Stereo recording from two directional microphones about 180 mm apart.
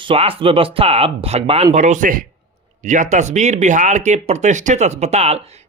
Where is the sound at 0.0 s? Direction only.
30° right (ahead or behind).